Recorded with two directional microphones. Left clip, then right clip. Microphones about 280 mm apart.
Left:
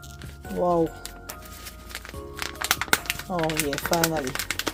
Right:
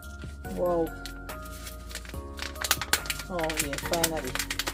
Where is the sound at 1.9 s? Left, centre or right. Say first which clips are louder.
Left 5 dB; left.